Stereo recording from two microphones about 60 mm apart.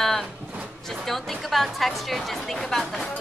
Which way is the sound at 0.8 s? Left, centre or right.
Centre.